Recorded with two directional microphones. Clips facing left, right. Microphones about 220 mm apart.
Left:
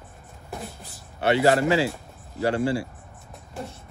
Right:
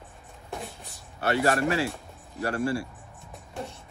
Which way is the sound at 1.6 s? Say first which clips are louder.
Left 4 dB; 90° left.